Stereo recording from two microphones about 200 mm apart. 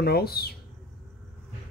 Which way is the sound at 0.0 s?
50° left (ahead or behind).